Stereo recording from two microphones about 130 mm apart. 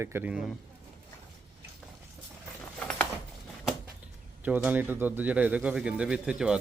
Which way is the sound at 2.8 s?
5° left (ahead or behind).